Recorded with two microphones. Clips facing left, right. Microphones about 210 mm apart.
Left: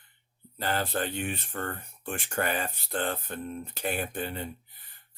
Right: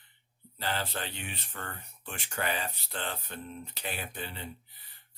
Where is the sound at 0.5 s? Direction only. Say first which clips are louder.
Left 5 dB; 50° left (ahead or behind).